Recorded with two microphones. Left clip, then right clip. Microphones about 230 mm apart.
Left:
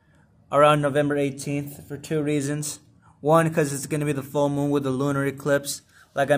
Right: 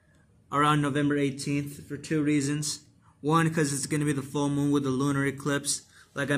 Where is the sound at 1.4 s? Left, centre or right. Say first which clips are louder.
Left 2 dB; left.